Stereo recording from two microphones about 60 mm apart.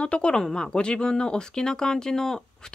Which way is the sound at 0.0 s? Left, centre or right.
Centre.